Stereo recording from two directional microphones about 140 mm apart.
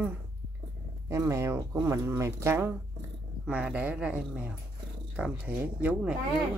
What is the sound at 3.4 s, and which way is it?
Humming, 5° right (ahead or behind).